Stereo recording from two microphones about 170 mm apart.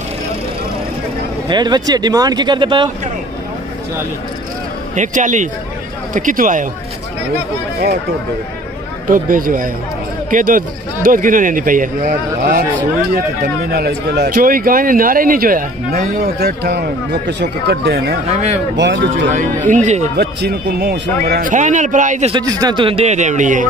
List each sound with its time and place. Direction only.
1.5 s speech: 25° right (ahead or behind)
4.9 s speech: 45° right (ahead or behind)
9.0 s speech: 55° right (ahead or behind)
17.3 s a man's voice: 85° right
18.8 s speech: 90° right
19.3 s speech: 50° right (ahead or behind)
20.2 s a man's voice: 75° right (ahead or behind)
21.5 s speech: 45° right (ahead or behind)
22.3 s a man's voice: 25° right (ahead or behind); by 23.7 s 50° right (ahead or behind)